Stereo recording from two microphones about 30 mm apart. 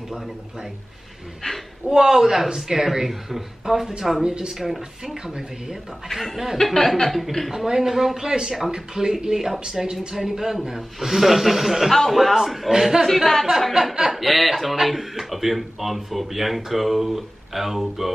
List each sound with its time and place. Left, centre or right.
1.9 s speech: centre
4.2 s speech: right
4.5 s speech: centre
5.1 s speech: right
6.3 s speech: centre
6.6 s speech: centre
7.5 s speech: centre
12.1 s speech: centre
12.4 s speech: centre
13.0 s speech: centre